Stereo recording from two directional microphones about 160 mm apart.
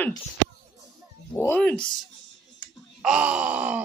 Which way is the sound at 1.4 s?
10° left (ahead or behind).